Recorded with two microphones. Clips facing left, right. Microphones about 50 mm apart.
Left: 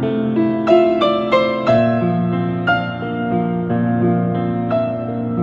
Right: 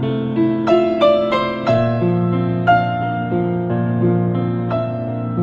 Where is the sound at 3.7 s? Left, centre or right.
Left.